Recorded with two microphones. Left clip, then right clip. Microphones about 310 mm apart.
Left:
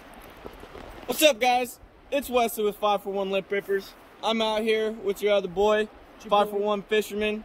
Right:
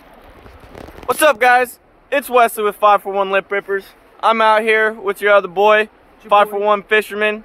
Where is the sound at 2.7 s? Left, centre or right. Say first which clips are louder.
Right 12 dB; right.